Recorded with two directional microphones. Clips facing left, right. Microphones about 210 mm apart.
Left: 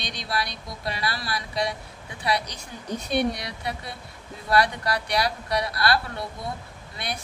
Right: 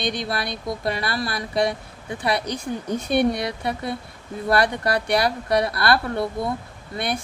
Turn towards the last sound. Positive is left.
turn(degrees=-55)  # may be behind; listen again after turning